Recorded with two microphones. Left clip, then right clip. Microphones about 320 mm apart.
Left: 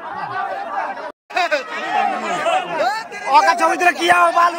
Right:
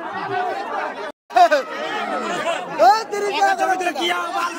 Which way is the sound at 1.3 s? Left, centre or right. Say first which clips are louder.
Right 5 dB; right.